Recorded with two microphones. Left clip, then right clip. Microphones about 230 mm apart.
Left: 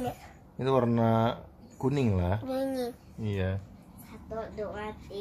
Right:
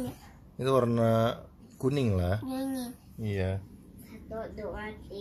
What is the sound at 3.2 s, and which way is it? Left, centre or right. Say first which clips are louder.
Speech: right 2 dB; centre.